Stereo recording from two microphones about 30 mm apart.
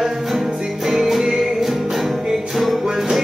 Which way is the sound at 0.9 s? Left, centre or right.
Centre.